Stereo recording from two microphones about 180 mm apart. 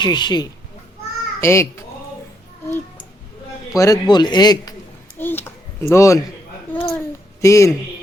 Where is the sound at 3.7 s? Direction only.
20° left (ahead or behind).